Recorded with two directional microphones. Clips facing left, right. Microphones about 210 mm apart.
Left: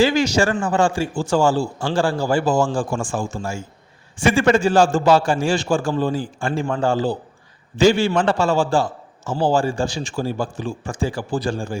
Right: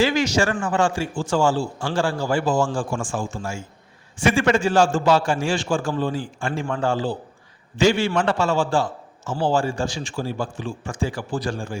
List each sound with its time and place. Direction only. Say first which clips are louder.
0.0 s a man's voice: left 3 dB; 30° left (ahead or behind)